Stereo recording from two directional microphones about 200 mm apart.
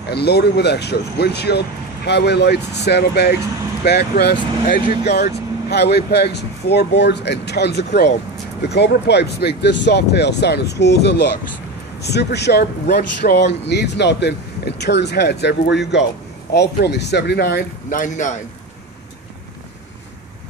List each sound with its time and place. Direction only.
0.1 s speech: 55° left (ahead or behind); by 18.3 s 40° left (ahead or behind)